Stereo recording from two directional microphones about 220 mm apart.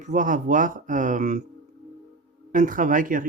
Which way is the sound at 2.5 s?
35° right (ahead or behind).